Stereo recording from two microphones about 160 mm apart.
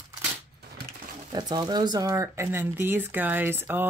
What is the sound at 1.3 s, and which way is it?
Speech, 25° right (ahead or behind).